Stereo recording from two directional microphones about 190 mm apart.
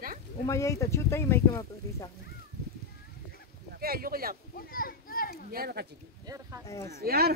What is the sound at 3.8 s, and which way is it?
Speech, 50° right (ahead or behind).